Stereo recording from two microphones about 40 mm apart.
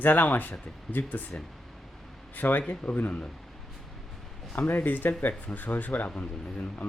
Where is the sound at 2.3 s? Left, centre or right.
Left.